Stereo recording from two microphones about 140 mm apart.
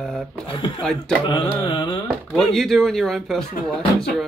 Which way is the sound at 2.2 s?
Centre (ahead or behind).